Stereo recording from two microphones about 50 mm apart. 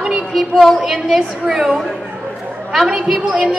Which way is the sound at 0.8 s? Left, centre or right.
Centre.